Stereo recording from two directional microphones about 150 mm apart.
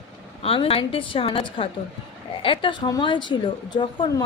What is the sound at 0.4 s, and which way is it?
Speech, 40° left (ahead or behind).